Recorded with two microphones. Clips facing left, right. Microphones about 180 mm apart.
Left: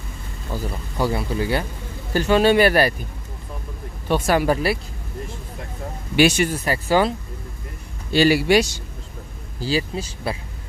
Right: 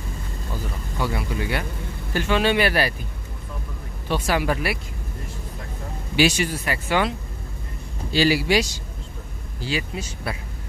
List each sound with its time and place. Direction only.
0.9 s speech: 35° left (ahead or behind)
4.1 s speech: 45° left (ahead or behind)
6.1 s speech: 50° left (ahead or behind)
6.6 s speech: 35° left (ahead or behind)
8.1 s speech: 55° left (ahead or behind)
9.6 s speech: 35° left (ahead or behind)